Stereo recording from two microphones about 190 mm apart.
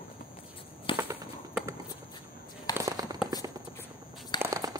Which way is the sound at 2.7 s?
20° right (ahead or behind).